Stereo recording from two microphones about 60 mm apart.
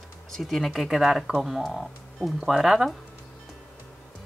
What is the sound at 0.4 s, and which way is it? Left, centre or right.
Speech, centre.